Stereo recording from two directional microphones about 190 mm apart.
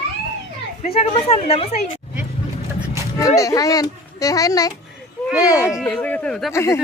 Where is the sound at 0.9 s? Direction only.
30° left (ahead or behind).